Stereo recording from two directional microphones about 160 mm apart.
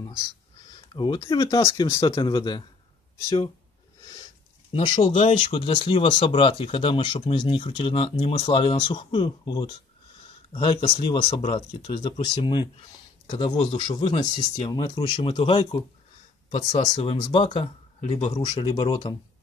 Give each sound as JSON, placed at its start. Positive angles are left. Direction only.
{"t": 0.9, "sound": "speech", "side_deg": 30}
{"t": 4.7, "sound": "speech", "side_deg": 30}
{"t": 13.6, "sound": "speech", "side_deg": 40}